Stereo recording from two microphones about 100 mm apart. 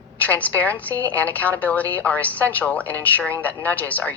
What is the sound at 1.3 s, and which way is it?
A man's voice, 15° left (ahead or behind).